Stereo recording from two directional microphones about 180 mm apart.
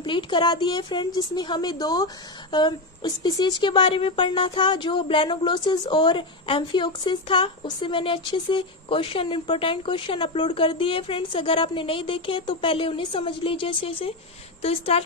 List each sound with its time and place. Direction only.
0.0 s speech: 25° left (ahead or behind)